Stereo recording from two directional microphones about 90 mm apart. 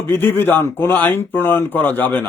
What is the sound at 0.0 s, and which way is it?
Speech, 25° left (ahead or behind).